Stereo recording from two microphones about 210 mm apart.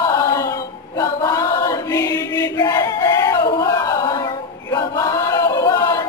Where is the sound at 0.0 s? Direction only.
15° left (ahead or behind).